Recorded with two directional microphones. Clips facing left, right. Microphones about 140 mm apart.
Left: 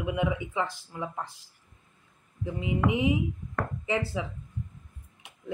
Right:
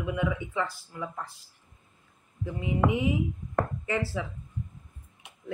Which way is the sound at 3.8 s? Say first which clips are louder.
Left 1 dB; 20° left (ahead or behind).